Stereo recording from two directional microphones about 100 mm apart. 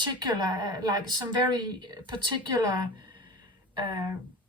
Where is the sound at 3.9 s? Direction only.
35° right (ahead or behind).